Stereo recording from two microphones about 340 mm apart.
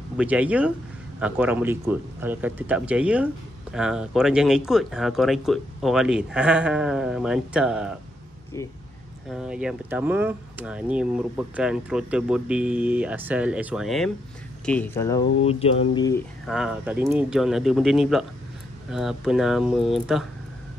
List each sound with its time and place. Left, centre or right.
0.2 s speech: centre
8.6 s speech: centre
9.3 s speech: centre
16.4 s speech: centre